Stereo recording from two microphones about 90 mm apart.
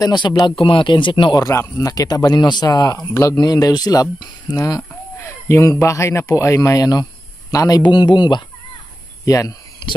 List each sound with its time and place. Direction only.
0.0 s speech: 55° left (ahead or behind)
0.5 s speech: 75° left (ahead or behind)
1.5 s speech: 30° left (ahead or behind)
1.9 s speech: 45° left (ahead or behind)
9.2 s speech: 40° left (ahead or behind)